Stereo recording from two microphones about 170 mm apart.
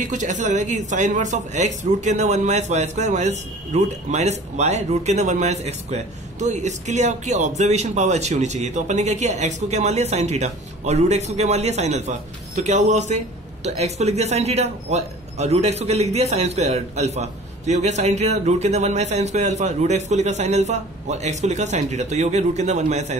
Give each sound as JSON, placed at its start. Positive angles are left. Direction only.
{"t": 0.1, "sound": "speech", "side_deg": -45}